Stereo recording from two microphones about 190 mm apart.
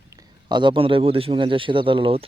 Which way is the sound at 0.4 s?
25° right (ahead or behind).